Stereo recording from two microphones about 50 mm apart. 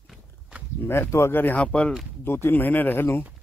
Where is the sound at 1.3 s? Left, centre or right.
Left.